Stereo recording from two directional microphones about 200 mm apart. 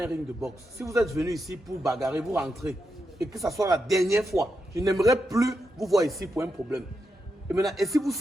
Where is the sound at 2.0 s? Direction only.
10° right (ahead or behind).